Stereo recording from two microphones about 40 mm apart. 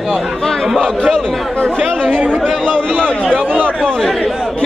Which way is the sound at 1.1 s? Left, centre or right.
Centre.